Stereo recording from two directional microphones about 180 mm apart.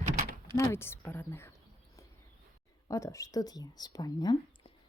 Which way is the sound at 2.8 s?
20° left (ahead or behind).